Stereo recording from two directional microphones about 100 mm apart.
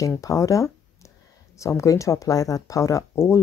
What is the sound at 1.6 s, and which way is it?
Speech, 30° left (ahead or behind).